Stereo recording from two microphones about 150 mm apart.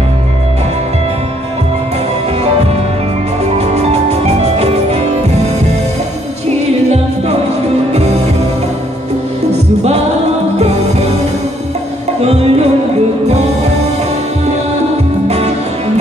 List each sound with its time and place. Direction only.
3.5 s music: 45° right (ahead or behind)
7.9 s music: 45° right (ahead or behind)
10.6 s music: 45° right (ahead or behind)
12.2 s music: 45° right (ahead or behind)
15.2 s music: 45° right (ahead or behind)